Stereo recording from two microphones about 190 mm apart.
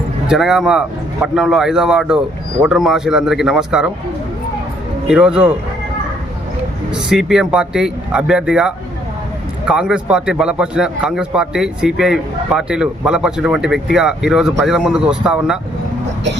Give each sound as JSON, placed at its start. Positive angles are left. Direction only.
{"t": 0.3, "sound": "a man's voice", "side_deg": 0}
{"t": 5.0, "sound": "a man's voice", "side_deg": -5}
{"t": 7.1, "sound": "a man's voice", "side_deg": 0}